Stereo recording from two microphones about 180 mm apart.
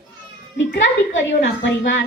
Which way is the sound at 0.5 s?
90° left.